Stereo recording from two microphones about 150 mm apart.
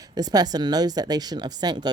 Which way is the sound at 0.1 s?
25° right (ahead or behind).